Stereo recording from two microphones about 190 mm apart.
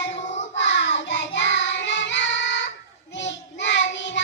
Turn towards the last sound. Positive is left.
turn(degrees=70)  # may be behind; listen again after turning